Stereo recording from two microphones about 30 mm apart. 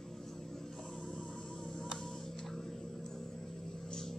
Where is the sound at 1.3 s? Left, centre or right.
Left.